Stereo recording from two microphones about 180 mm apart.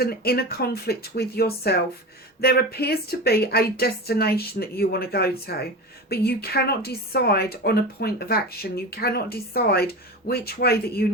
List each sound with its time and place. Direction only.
0.0 s a woman's voice: 60° left (ahead or behind)